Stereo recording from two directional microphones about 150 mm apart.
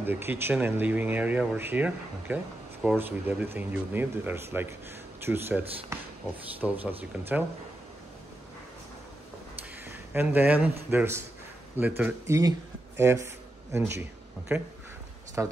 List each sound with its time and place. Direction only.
0.0 s speech: 15° right (ahead or behind)
9.8 s speech: 15° right (ahead or behind)
15.4 s speech: 15° right (ahead or behind)